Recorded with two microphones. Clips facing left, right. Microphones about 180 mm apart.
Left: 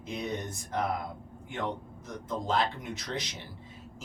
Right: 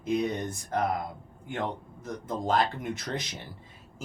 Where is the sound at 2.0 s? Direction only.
55° right (ahead or behind).